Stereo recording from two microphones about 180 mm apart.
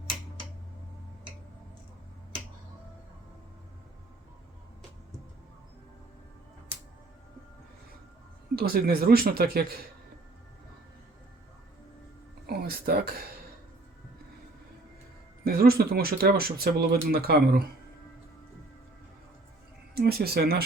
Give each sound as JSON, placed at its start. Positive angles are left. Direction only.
{"t": 8.5, "sound": "speech", "side_deg": -60}
{"t": 12.5, "sound": "a sound", "side_deg": -60}
{"t": 15.4, "sound": "speech", "side_deg": -60}
{"t": 19.9, "sound": "speech", "side_deg": -60}